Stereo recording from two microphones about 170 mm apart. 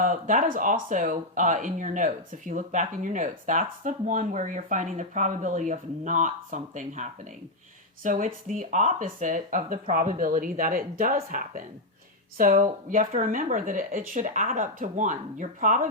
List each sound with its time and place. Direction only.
0.0 s speech: 50° right (ahead or behind)